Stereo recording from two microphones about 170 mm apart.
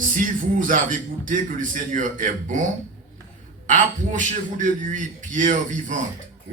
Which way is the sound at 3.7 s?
50° right (ahead or behind).